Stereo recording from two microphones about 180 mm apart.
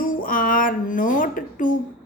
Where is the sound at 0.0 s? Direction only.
50° left (ahead or behind).